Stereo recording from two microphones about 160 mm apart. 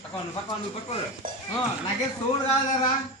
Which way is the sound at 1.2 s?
60° right (ahead or behind).